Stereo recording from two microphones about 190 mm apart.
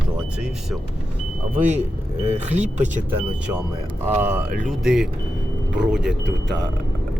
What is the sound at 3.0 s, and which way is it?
Speech, 5° right (ahead or behind).